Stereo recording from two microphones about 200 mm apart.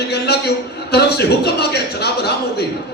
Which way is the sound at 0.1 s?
55° left (ahead or behind).